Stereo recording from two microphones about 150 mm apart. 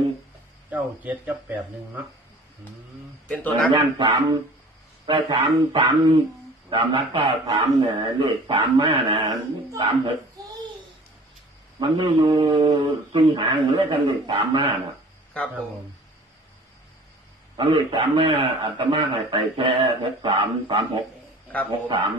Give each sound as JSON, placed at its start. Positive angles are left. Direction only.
{"t": 0.7, "sound": "speech", "side_deg": -10}
{"t": 3.3, "sound": "a man's voice", "side_deg": 10}
{"t": 3.7, "sound": "a man's voice", "side_deg": -35}
{"t": 11.8, "sound": "a man's voice", "side_deg": -35}
{"t": 17.6, "sound": "a man's voice", "side_deg": -35}